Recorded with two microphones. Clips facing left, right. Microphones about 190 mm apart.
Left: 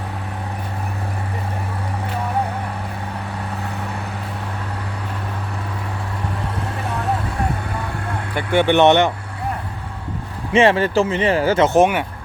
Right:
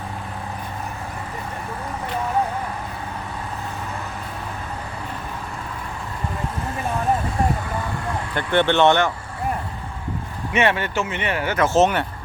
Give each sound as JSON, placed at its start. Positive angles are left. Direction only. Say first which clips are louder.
{"t": 8.4, "sound": "speech", "louder": "left 3 dB", "side_deg": 10}
{"t": 10.5, "sound": "speech", "louder": "left 6 dB", "side_deg": 30}